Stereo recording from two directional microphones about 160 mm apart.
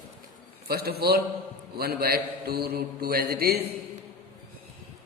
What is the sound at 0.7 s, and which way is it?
Mantra, 75° right (ahead or behind).